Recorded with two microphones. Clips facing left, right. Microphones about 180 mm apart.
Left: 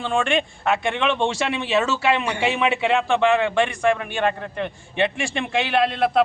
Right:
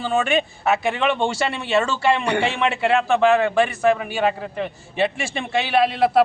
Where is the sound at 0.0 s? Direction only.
5° right (ahead or behind).